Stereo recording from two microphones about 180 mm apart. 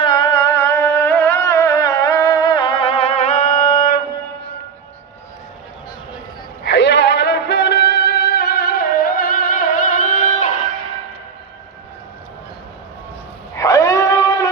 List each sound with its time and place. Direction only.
0.0 s music: 25° left (ahead or behind); by 4.0 s 50° left (ahead or behind)
6.7 s music: 75° left (ahead or behind); by 10.5 s 45° left (ahead or behind)
13.6 s a sound: 20° left (ahead or behind)